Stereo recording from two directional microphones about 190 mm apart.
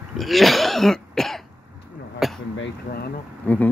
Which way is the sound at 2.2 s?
Centre (ahead or behind).